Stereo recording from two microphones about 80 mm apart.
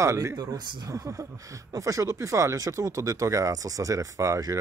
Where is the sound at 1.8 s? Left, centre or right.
Right.